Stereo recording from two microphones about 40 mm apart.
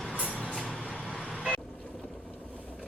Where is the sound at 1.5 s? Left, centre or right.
Left.